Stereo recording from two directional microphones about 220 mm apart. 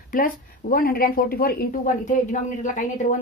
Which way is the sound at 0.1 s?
40° left (ahead or behind).